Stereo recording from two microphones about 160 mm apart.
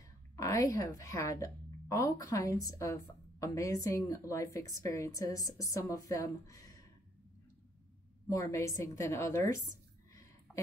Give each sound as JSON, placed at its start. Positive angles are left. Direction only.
{"t": 0.0, "sound": "a woman's voice", "side_deg": 20}
{"t": 8.3, "sound": "a woman's voice", "side_deg": 20}
{"t": 10.5, "sound": "a sound", "side_deg": 0}